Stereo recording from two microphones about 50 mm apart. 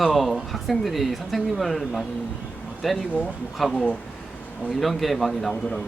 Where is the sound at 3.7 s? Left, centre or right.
Centre.